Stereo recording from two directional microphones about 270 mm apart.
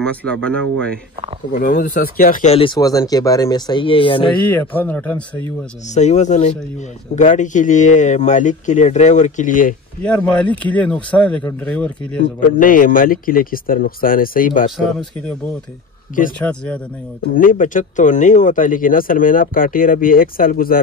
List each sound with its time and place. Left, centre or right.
0.0 s speech: centre
1.5 s speech: left
4.5 s speech: centre
5.9 s speech: left
10.0 s speech: centre
12.2 s speech: left
16.3 s speech: centre
17.2 s speech: left